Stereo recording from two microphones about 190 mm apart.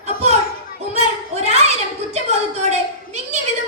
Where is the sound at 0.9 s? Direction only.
35° right (ahead or behind).